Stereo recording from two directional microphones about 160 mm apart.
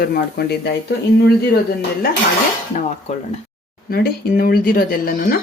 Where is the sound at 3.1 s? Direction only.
45° left (ahead or behind).